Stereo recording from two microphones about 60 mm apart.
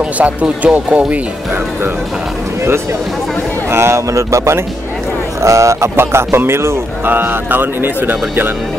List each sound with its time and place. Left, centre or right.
0.0 s speech: right
3.7 s speech: right
7.1 s speech: right